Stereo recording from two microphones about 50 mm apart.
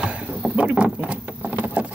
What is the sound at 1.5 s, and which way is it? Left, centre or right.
Vehicle, right.